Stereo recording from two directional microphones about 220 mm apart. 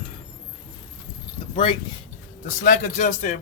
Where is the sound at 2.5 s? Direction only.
35° left (ahead or behind).